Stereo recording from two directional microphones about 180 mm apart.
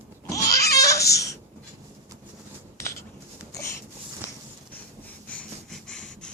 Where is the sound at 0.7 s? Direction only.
20° left (ahead or behind).